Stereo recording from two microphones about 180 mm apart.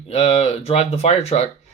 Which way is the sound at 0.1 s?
35° left (ahead or behind).